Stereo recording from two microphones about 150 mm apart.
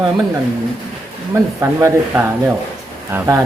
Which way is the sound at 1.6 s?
15° right (ahead or behind).